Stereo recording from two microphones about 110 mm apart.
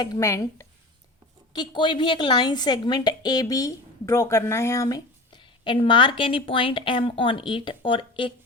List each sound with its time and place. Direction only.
0.2 s speech: 25° left (ahead or behind)
1.5 s a woman's voice: 45° left (ahead or behind)